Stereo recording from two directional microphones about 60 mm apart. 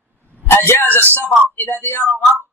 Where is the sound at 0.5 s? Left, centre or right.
Left.